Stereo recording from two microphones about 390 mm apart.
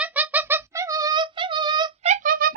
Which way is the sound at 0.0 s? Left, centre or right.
Centre.